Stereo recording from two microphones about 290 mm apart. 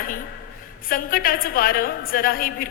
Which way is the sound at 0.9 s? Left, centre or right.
Left.